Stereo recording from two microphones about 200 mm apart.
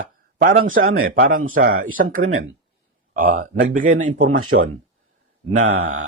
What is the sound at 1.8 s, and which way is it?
A man's voice, 45° right (ahead or behind).